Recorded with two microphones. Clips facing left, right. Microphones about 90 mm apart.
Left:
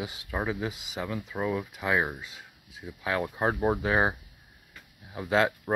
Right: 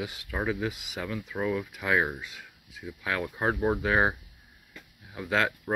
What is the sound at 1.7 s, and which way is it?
Speech, 5° left (ahead or behind).